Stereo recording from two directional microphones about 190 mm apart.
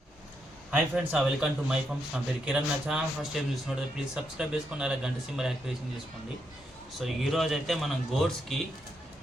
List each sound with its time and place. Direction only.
0.7 s a man's voice: 5° right (ahead or behind)
7.0 s a man's voice: centre (ahead or behind)